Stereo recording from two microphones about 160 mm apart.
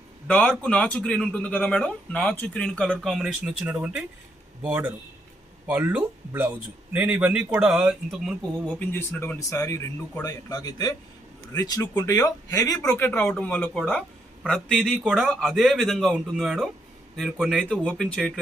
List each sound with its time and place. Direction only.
0.3 s speech: 5° left (ahead or behind)
8.8 s speech: 10° left (ahead or behind)
13.1 s speech: 5° left (ahead or behind)